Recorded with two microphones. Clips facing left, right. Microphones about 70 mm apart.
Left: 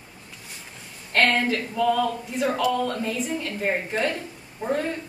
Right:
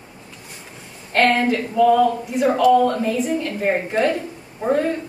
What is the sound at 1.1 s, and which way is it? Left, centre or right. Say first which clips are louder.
A woman's voice: right 5 dB; centre.